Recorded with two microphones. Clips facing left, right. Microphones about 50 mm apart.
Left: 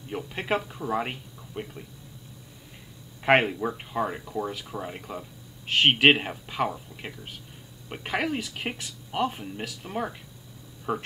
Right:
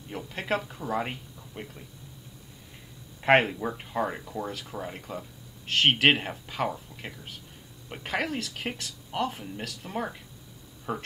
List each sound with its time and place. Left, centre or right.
0.3 s speech: centre
3.2 s speech: centre